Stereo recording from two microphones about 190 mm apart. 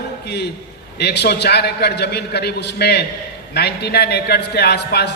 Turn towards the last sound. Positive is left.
turn(degrees=60)  # may be behind; listen again after turning